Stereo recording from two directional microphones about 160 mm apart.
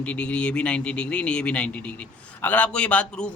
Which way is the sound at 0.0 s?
10° left (ahead or behind).